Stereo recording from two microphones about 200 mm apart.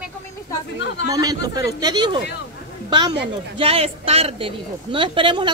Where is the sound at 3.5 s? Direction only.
30° right (ahead or behind).